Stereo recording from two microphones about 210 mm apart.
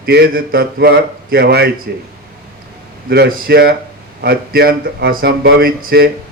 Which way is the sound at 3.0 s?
50° right (ahead or behind).